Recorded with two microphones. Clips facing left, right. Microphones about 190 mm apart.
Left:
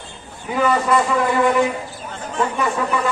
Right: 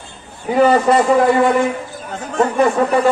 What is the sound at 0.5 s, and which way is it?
Speech, 35° right (ahead or behind).